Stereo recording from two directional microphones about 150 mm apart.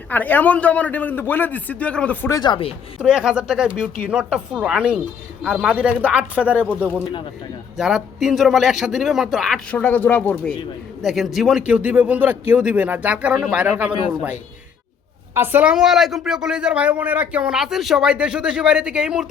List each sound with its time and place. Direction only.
0.1 s a man's voice: 10° left (ahead or behind)
2.3 s speech: 30° left (ahead or behind)
3.0 s speech: 5° right (ahead or behind)
9.7 s a man's voice: 10° left (ahead or behind)
11.0 s speech: centre (ahead or behind)
15.4 s speech: 10° right (ahead or behind)